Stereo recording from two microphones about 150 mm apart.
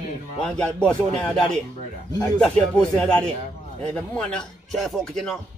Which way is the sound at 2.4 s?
5° left (ahead or behind).